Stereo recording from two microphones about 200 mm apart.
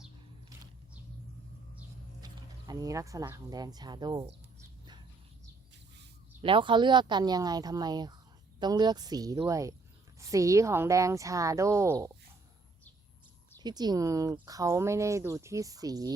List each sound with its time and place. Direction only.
2.2 s speech: 20° right (ahead or behind)
6.4 s speech: 25° right (ahead or behind)
13.6 s speech: 20° right (ahead or behind)